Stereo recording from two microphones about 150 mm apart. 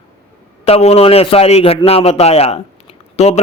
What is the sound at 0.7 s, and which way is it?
A man's voice, 45° left (ahead or behind).